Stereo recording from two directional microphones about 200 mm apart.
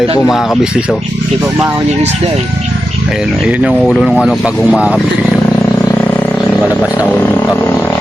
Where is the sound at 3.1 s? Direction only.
5° right (ahead or behind).